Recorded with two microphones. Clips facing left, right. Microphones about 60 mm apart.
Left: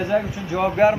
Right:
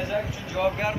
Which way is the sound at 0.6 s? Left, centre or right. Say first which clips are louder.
Left 9 dB; left.